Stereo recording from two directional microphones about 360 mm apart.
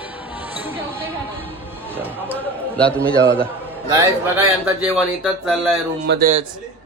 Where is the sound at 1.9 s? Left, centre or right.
Centre.